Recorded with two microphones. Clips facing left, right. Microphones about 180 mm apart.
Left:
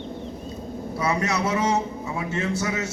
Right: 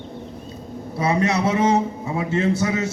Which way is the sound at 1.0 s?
30° right (ahead or behind).